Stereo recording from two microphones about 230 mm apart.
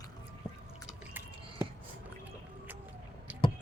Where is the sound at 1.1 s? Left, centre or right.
Centre.